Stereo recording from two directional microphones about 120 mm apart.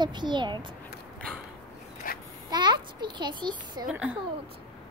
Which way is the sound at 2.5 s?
40° right (ahead or behind).